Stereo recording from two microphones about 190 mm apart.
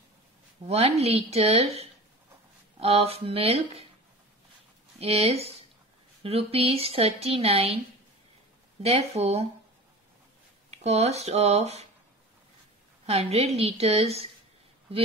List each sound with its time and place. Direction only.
0.7 s a woman's voice: 35° right (ahead or behind)
5.0 s a woman's voice: 30° right (ahead or behind)
8.8 s a woman's voice: 30° right (ahead or behind)
10.7 s a woman's voice: 35° right (ahead or behind)
13.0 s a woman's voice: 35° right (ahead or behind)